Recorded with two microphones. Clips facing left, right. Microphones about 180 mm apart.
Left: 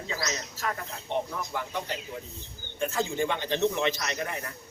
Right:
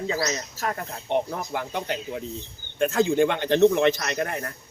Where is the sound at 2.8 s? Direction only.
70° right (ahead or behind); by 4.5 s 55° right (ahead or behind).